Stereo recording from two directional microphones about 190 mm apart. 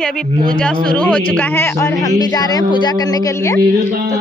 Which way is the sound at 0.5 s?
5° left (ahead or behind).